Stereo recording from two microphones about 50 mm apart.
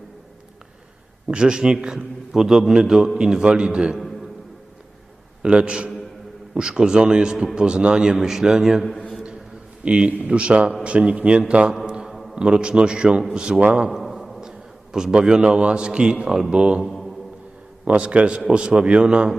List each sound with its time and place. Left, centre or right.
1.3 s a man's voice: centre
5.4 s a man's voice: centre
9.8 s a man's voice: right
11.9 s a sound: centre
12.3 s a man's voice: centre
13.9 s a sound: centre
14.9 s a man's voice: centre
16.8 s mantra: centre
17.8 s a man's voice: right